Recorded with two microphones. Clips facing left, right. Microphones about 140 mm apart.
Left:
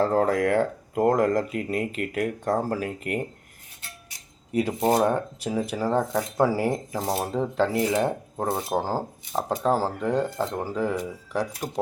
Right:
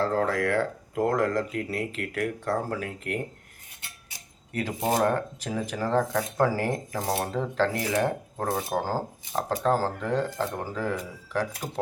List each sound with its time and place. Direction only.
0.0 s speech: 25° left (ahead or behind)
4.5 s speech: 15° left (ahead or behind)